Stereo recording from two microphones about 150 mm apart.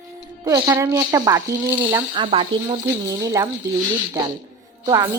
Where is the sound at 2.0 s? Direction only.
35° right (ahead or behind).